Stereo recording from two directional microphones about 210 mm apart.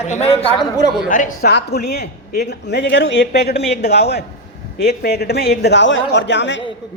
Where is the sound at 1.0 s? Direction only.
40° left (ahead or behind); by 6.6 s 60° left (ahead or behind).